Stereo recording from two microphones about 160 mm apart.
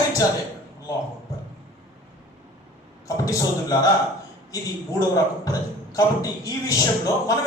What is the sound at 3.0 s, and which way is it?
Speech, 20° left (ahead or behind).